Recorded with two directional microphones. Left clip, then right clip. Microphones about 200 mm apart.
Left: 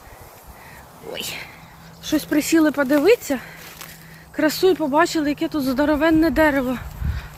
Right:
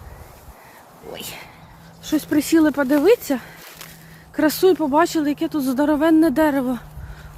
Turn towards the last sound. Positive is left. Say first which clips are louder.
# left 1 dB
turn(degrees=-30)  # may be behind; listen again after turning